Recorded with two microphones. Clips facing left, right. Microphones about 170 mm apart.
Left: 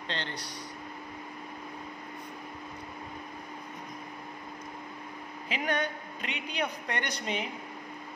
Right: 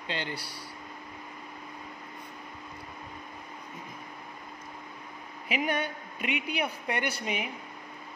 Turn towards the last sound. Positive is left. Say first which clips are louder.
# right 1 dB
turn(degrees=-10)  # may be behind; listen again after turning